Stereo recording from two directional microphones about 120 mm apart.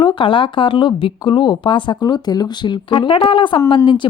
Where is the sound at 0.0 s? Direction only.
45° left (ahead or behind).